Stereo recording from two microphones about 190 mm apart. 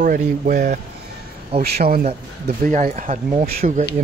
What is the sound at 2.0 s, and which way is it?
Speech, 35° right (ahead or behind).